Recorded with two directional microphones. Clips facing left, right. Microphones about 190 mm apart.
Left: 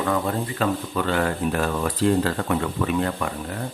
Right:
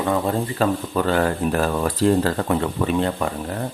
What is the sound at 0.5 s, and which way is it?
Speech, 40° right (ahead or behind).